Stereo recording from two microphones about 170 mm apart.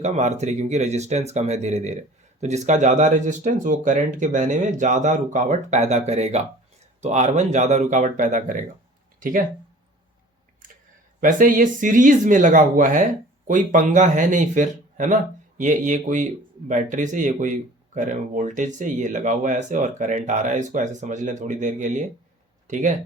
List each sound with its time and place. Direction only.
0.0 s a man's voice: 40° right (ahead or behind)
11.2 s a man's voice: 50° right (ahead or behind)